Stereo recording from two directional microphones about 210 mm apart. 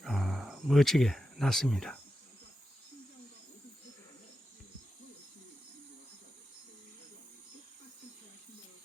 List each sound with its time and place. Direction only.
0.0 s cricket: centre (ahead or behind)